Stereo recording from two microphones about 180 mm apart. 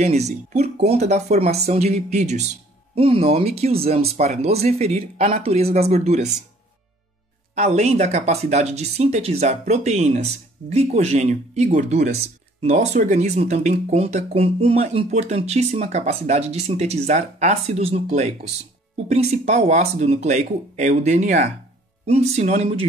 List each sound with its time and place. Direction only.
0.0 s speech: 40° right (ahead or behind)
7.5 s speech: 40° right (ahead or behind)